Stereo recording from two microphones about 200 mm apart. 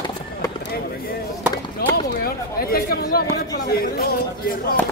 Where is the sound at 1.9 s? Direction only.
50° left (ahead or behind).